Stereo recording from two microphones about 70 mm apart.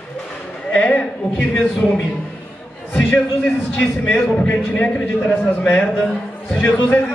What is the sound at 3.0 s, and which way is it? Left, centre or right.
Speech, left.